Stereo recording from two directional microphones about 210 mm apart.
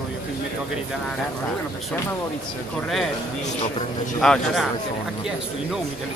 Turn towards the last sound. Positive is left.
turn(degrees=5)  # may be behind; listen again after turning